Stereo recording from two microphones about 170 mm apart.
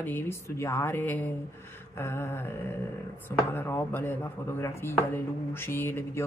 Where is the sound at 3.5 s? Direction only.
15° left (ahead or behind).